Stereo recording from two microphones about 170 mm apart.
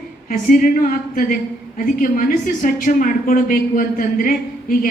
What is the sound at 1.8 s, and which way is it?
A woman's voice, 55° left (ahead or behind).